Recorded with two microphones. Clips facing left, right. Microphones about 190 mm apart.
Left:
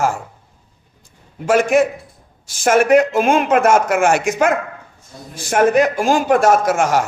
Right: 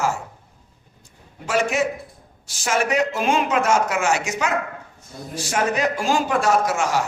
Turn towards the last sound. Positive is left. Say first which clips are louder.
# left 5 dB
turn(degrees=55)  # may be behind; listen again after turning